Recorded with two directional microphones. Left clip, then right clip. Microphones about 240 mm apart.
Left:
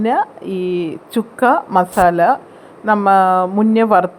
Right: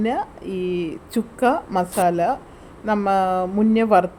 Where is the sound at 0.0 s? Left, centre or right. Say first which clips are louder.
Left 7 dB; centre.